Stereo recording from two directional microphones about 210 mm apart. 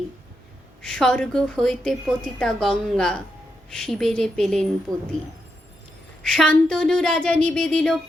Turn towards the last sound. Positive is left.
turn(degrees=0)  # may be behind; listen again after turning